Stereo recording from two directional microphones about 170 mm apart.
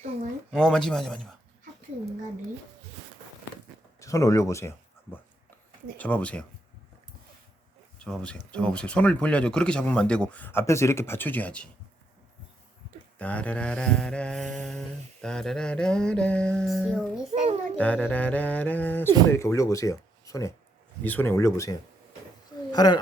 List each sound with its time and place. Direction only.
0.5 s mantra: 5° left (ahead or behind)
4.0 s speech: 20° left (ahead or behind)
6.0 s speech: 10° left (ahead or behind)
7.9 s speech: 5° left (ahead or behind)
13.1 s mantra: 10° left (ahead or behind)
17.3 s a sound: 40° right (ahead or behind)
17.7 s speech: 10° left (ahead or behind); by 23.0 s 25° left (ahead or behind)